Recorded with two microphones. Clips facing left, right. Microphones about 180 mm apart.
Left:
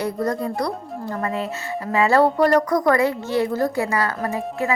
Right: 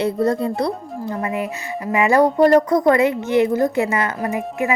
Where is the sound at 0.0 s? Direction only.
25° right (ahead or behind).